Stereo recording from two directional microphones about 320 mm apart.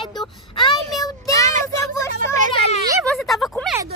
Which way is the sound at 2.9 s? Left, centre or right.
Centre.